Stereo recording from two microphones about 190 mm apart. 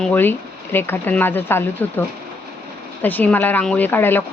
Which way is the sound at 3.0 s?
10° left (ahead or behind).